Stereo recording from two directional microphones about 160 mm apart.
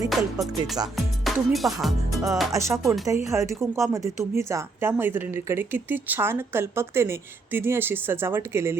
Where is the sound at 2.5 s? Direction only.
20° right (ahead or behind).